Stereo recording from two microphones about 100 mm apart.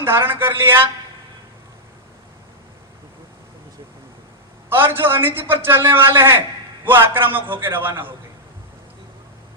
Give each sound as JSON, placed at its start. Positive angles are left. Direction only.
{"t": 0.0, "sound": "a man's voice", "side_deg": -20}
{"t": 4.7, "sound": "a man's voice", "side_deg": -20}